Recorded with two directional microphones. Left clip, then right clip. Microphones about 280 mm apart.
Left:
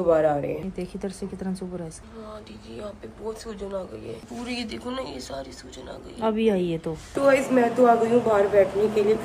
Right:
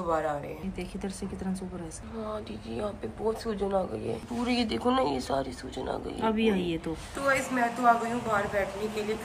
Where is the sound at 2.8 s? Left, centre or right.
Centre.